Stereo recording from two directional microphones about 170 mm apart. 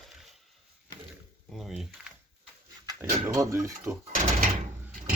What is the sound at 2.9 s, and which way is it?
Speech, 20° right (ahead or behind).